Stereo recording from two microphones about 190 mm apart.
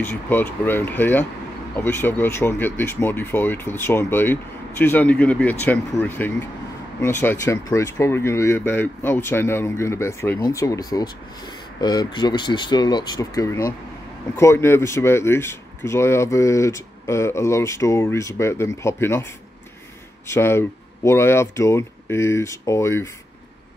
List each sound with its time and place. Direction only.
0.0 s speech: 10° left (ahead or behind)